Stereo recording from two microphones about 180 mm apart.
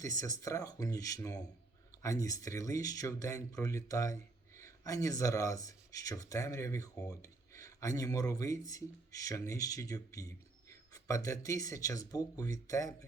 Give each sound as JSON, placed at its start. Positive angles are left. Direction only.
{"t": 0.0, "sound": "speech", "side_deg": 20}